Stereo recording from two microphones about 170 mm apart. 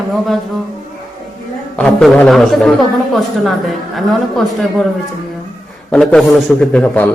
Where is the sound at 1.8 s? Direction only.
5° left (ahead or behind).